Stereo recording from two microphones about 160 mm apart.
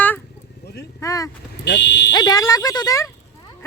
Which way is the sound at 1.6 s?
90° left.